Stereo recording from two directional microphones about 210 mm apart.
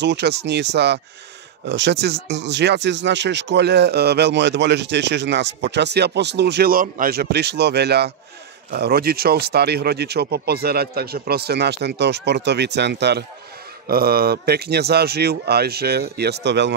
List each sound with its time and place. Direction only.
0.0 s speech: 55° right (ahead or behind)